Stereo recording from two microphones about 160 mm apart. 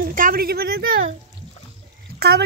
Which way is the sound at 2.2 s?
90° right.